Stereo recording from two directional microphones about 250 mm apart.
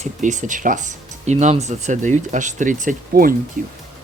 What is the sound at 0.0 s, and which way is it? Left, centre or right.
Speech, right.